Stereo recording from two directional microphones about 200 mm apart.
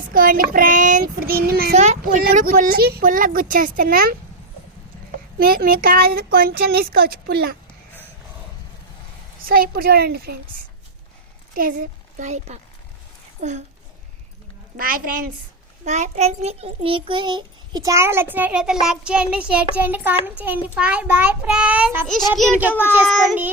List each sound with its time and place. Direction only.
0.1 s a child's voice: 45° right (ahead or behind)
1.7 s speech: 35° right (ahead or behind)
2.2 s a child's voice: 45° right (ahead or behind)
9.5 s a child's voice: 50° right (ahead or behind)
11.5 s speech: 45° right (ahead or behind)
14.8 s a child's voice: 45° right (ahead or behind); by 23.5 s 5° right (ahead or behind)